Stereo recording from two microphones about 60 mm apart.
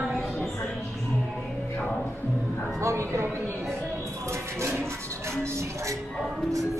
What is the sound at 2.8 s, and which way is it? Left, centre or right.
Speech, right.